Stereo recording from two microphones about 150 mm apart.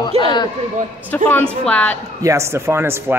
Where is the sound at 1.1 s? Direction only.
10° left (ahead or behind).